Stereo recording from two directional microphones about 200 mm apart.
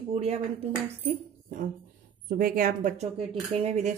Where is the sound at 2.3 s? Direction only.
45° right (ahead or behind).